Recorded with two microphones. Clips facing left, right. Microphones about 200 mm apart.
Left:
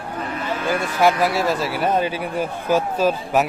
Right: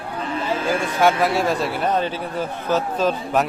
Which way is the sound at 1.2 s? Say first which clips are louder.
Even; centre (ahead or behind).